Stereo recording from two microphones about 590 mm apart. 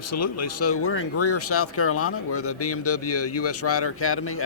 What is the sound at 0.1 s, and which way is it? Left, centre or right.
Speech, left.